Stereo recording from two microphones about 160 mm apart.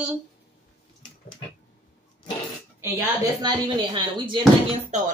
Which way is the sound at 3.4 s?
30° right (ahead or behind).